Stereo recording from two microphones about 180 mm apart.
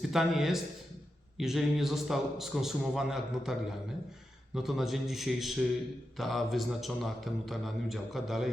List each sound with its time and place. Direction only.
0.1 s a man's voice: centre (ahead or behind)
4.5 s a man's voice: centre (ahead or behind)